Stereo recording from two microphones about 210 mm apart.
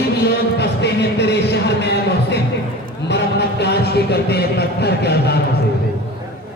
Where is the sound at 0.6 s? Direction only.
55° left (ahead or behind).